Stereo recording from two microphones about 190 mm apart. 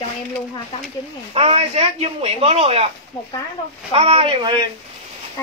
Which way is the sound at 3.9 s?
30° right (ahead or behind).